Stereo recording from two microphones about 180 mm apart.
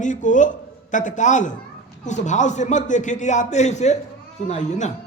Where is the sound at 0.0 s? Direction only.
45° left (ahead or behind).